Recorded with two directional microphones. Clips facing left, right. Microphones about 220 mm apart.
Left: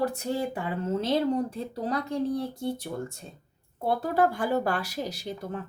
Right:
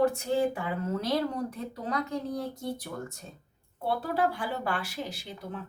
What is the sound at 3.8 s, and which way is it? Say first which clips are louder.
Speech: left 4 dB; 45° left (ahead or behind).